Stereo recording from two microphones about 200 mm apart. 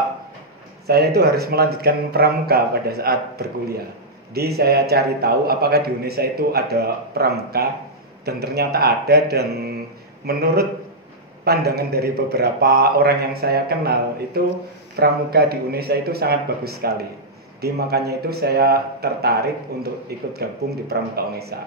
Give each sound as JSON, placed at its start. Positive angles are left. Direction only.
{"t": 0.8, "sound": "speech", "side_deg": -55}